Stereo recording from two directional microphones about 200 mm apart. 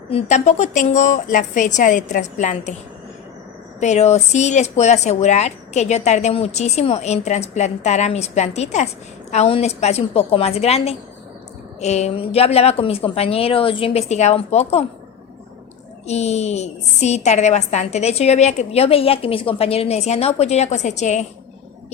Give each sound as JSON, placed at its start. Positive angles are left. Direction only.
{"t": 0.1, "sound": "a woman's voice", "side_deg": 35}
{"t": 3.8, "sound": "a woman's voice", "side_deg": 35}
{"t": 16.0, "sound": "a woman's voice", "side_deg": 35}